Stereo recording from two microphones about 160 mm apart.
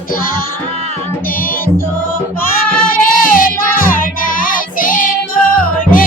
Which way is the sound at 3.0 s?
60° left (ahead or behind).